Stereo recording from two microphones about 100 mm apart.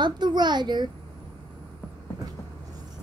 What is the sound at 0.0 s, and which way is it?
Speech, 50° right (ahead or behind).